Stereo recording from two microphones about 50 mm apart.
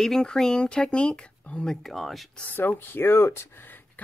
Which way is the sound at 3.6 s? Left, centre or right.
Left.